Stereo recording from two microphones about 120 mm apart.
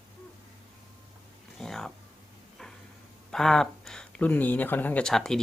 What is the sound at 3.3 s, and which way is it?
Speech, 5° left (ahead or behind).